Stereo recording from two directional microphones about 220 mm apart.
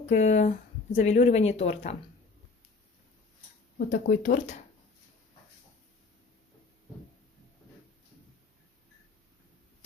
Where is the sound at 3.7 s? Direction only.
40° left (ahead or behind).